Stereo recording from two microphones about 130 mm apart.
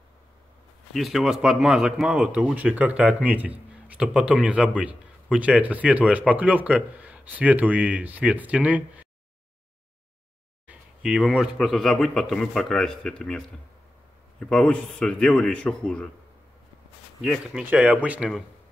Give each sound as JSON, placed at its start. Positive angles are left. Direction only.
{"t": 0.9, "sound": "speech", "side_deg": 0}
{"t": 10.7, "sound": "speech", "side_deg": -5}
{"t": 14.4, "sound": "speech", "side_deg": 5}
{"t": 17.2, "sound": "speech", "side_deg": -5}